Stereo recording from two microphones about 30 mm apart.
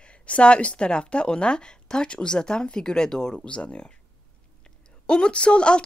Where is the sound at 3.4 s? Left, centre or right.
Left.